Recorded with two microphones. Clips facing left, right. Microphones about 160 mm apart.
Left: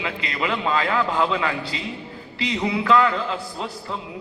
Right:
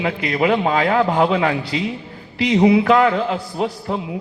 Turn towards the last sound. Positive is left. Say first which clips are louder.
# right 8 dB
turn(degrees=-60)  # may be behind; listen again after turning